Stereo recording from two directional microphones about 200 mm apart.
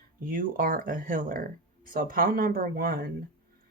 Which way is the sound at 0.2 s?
45° right (ahead or behind).